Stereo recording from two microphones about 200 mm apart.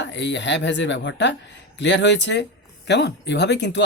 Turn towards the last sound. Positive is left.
turn(degrees=60)  # may be behind; listen again after turning